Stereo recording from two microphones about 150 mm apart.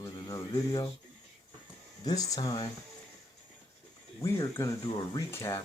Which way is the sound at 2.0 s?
25° left (ahead or behind).